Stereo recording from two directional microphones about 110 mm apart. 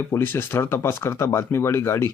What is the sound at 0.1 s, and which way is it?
Speech, 20° left (ahead or behind).